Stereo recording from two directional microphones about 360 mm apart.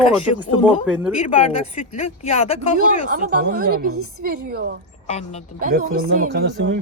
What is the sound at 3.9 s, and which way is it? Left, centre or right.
Speech, right.